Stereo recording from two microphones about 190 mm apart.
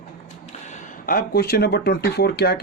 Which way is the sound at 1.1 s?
50° left (ahead or behind).